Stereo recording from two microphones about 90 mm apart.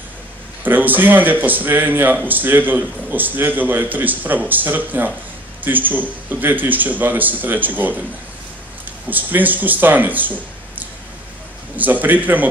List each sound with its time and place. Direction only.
0.7 s a man's voice: 20° right (ahead or behind)
9.1 s a man's voice: 20° right (ahead or behind)